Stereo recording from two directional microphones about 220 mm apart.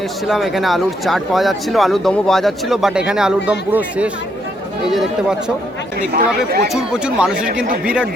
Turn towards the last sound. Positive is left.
turn(degrees=-5)  # may be behind; listen again after turning